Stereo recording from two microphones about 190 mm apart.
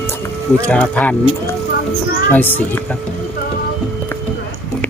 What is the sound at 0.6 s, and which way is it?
Speech, 5° left (ahead or behind).